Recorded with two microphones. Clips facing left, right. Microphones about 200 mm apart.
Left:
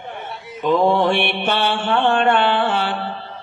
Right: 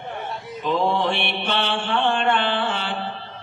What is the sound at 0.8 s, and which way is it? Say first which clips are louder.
Mantra: left 6 dB; 50° left (ahead or behind).